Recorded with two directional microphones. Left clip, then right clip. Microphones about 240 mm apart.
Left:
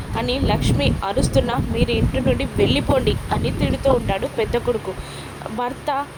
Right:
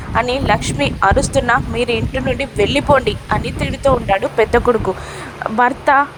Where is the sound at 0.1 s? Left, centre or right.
Centre.